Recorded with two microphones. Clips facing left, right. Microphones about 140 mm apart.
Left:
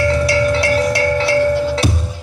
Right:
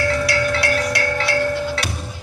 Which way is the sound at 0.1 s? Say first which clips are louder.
Left 5 dB; 30° left (ahead or behind).